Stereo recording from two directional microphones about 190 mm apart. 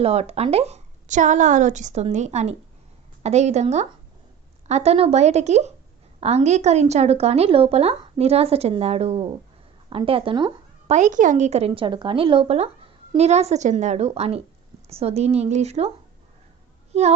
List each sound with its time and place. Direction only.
0.0 s speech: 35° right (ahead or behind)
10.9 s speech: 40° right (ahead or behind)
16.9 s speech: 35° right (ahead or behind)